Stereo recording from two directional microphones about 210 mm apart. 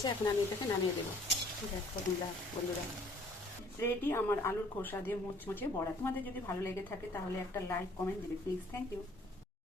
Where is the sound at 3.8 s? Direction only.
10° left (ahead or behind).